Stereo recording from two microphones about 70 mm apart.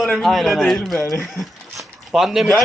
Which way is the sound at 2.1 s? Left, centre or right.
Centre.